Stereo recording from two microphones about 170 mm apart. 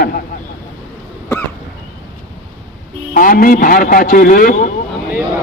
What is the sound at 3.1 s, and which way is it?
A man's voice, 55° left (ahead or behind).